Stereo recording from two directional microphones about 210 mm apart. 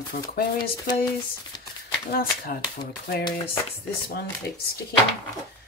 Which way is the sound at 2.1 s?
45° left (ahead or behind).